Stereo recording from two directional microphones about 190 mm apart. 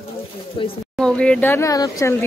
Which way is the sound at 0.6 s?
25° left (ahead or behind).